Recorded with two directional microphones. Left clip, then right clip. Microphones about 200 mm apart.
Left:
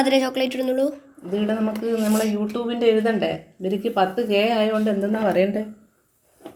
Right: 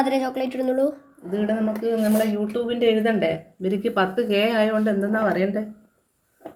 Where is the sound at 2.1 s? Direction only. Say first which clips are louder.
Right 2 dB; 20° right (ahead or behind).